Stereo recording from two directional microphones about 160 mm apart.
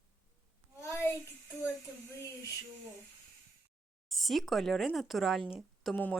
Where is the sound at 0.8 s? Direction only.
15° left (ahead or behind).